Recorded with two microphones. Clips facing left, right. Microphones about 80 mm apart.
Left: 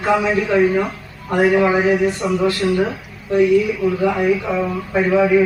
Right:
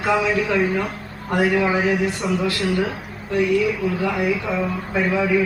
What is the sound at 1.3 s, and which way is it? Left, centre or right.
Speech, left.